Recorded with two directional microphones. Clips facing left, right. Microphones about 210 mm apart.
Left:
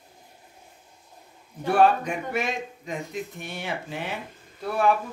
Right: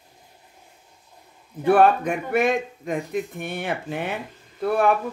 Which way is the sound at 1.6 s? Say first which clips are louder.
Right 3 dB; 55° right (ahead or behind).